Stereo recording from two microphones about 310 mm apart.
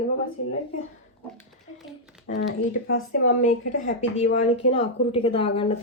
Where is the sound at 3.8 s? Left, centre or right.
Left.